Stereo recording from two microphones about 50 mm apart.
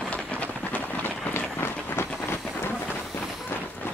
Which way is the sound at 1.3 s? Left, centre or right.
Left.